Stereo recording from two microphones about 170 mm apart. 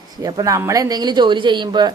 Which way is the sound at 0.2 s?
20° right (ahead or behind).